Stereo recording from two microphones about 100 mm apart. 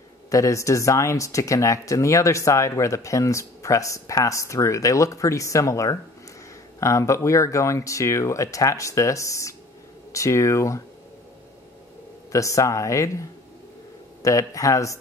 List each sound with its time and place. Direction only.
0.3 s speech: 35° left (ahead or behind)
12.3 s speech: 30° left (ahead or behind)
14.2 s speech: 35° left (ahead or behind)